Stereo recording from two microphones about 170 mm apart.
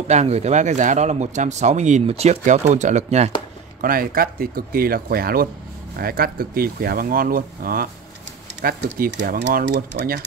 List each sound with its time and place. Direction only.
0.1 s speech: 40° right (ahead or behind)
3.8 s speech: 60° right (ahead or behind)